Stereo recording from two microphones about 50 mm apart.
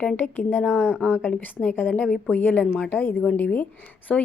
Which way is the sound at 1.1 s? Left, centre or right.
Left.